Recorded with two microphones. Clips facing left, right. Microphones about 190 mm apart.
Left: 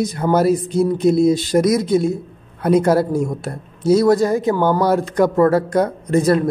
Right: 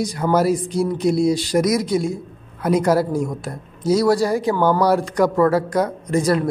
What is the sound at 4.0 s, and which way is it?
Speech, 20° left (ahead or behind).